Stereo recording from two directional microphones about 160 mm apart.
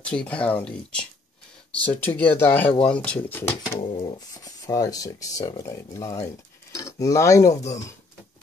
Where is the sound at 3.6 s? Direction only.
30° left (ahead or behind).